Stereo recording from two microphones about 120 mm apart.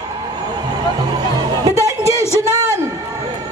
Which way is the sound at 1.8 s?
25° right (ahead or behind).